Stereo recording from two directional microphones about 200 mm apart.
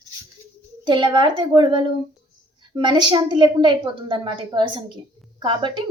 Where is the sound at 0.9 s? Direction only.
20° right (ahead or behind).